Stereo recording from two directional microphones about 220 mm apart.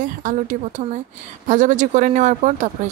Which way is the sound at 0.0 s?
35° right (ahead or behind).